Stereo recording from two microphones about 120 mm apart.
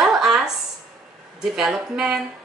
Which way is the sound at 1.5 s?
5° right (ahead or behind).